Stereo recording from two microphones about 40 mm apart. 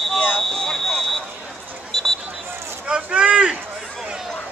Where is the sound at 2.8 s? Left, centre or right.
Right.